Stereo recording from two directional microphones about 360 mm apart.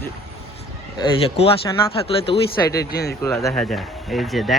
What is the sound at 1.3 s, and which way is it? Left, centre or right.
Speech, centre.